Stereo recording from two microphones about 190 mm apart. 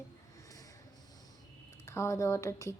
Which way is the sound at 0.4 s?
20° left (ahead or behind).